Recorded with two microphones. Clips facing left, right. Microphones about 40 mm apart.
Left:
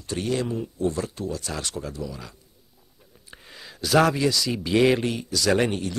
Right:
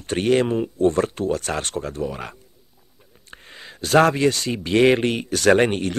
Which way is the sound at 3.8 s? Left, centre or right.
Right.